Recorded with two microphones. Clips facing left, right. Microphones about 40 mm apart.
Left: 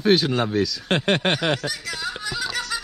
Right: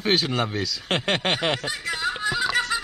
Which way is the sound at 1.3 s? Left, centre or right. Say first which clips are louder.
Left 1 dB; right.